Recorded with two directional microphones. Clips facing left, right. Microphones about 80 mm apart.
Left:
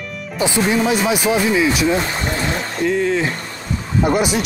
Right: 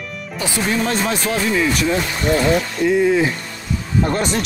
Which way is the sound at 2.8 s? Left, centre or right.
Centre.